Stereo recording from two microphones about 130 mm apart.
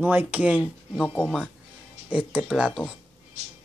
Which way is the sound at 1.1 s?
10° left (ahead or behind).